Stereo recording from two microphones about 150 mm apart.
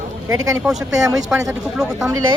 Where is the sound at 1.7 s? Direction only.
5° right (ahead or behind).